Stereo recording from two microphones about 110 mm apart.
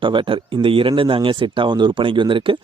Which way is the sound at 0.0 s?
50° right (ahead or behind).